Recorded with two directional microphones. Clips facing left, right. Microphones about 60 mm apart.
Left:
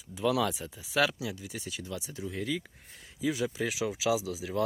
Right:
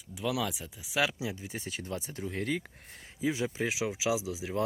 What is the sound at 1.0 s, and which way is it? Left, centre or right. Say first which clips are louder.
Speech: left 1 dB; right.